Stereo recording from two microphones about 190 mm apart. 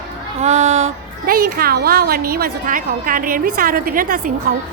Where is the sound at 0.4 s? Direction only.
35° right (ahead or behind).